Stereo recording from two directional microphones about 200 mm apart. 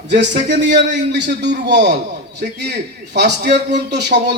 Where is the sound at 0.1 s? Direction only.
60° right (ahead or behind).